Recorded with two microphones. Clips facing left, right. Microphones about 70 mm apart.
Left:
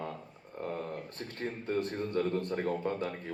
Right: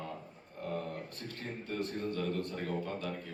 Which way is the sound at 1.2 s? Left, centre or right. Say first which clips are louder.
Left 5 dB; left.